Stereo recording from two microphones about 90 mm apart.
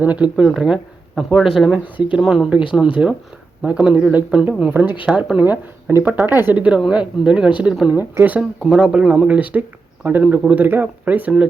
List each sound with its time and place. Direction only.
0.0 s speech: 15° right (ahead or behind)
0.4 s speech: 5° right (ahead or behind)
7.9 s speech: 20° right (ahead or behind)
8.6 s speech: 5° right (ahead or behind)